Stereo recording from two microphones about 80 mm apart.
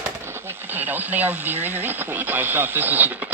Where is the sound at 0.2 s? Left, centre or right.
Right.